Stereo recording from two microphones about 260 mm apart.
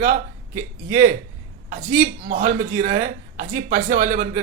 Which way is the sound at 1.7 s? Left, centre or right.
Right.